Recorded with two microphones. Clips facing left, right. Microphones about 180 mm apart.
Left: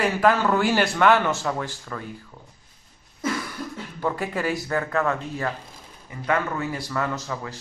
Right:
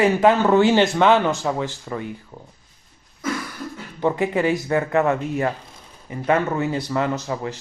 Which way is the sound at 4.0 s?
20° right (ahead or behind).